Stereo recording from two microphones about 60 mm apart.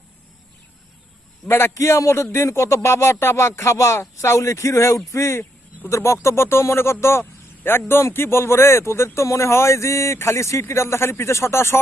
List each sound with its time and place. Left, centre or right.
1.5 s speech: left